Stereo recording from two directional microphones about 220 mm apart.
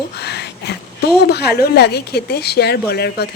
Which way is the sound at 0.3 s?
50° left (ahead or behind).